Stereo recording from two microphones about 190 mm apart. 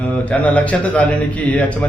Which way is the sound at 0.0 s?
5° left (ahead or behind).